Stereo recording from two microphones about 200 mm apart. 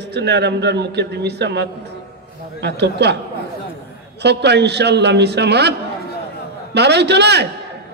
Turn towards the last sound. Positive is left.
turn(degrees=-55)  # may be behind; listen again after turning